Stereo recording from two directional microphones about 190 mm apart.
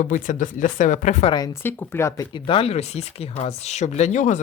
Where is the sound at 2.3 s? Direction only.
25° left (ahead or behind).